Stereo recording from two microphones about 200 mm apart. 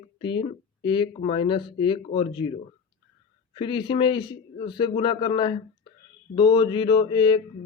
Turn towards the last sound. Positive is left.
turn(degrees=25)  # may be behind; listen again after turning